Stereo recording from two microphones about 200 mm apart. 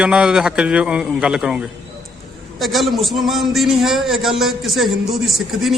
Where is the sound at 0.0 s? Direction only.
5° right (ahead or behind).